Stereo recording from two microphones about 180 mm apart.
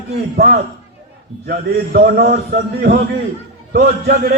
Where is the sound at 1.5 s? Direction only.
60° right (ahead or behind).